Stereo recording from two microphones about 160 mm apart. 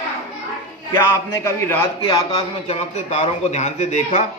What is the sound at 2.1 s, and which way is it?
Speech, 25° left (ahead or behind).